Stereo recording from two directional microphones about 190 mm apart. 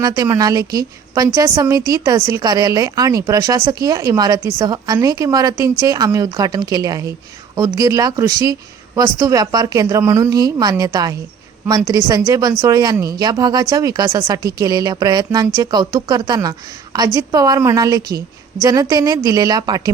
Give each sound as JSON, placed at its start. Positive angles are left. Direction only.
{"t": 0.0, "sound": "a woman's voice", "side_deg": -15}